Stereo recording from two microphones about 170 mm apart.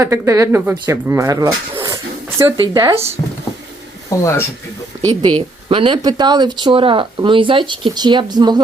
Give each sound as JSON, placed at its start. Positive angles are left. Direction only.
{"t": 0.0, "sound": "speech", "side_deg": -15}
{"t": 4.2, "sound": "speech", "side_deg": 15}
{"t": 5.0, "sound": "speech", "side_deg": -25}